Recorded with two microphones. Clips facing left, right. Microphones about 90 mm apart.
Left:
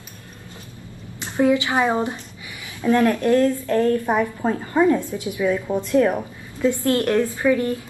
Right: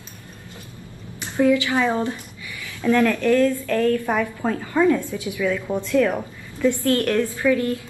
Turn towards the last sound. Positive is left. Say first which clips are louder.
# left 1 dB
turn(degrees=25)  # may be behind; listen again after turning